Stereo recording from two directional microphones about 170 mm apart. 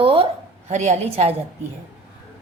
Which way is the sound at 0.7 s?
45° right (ahead or behind).